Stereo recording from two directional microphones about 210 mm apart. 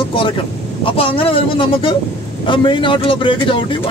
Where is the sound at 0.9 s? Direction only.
25° left (ahead or behind).